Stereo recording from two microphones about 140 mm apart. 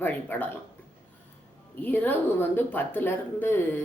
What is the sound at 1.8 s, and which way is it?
A woman's voice, 15° left (ahead or behind).